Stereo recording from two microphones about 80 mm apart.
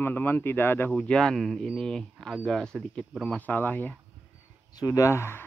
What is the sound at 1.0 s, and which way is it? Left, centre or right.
Speech, centre.